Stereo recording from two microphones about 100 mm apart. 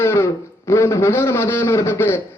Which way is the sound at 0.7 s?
30° left (ahead or behind).